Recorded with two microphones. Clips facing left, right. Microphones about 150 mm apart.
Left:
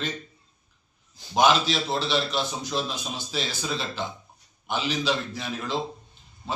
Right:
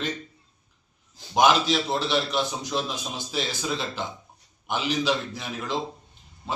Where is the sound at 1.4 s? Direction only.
15° right (ahead or behind).